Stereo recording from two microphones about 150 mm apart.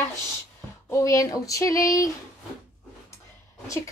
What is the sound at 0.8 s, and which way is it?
A woman's voice, 20° left (ahead or behind).